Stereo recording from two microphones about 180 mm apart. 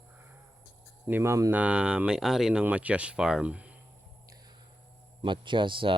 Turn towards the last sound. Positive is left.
turn(degrees=-30)  # may be behind; listen again after turning